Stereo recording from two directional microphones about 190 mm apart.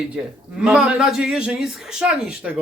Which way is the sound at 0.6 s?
5° right (ahead or behind).